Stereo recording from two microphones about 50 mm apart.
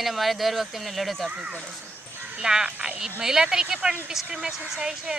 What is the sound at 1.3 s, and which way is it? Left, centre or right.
Speech, right.